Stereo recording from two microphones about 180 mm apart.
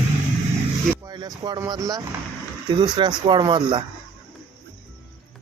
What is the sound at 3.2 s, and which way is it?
Speech, 25° right (ahead or behind).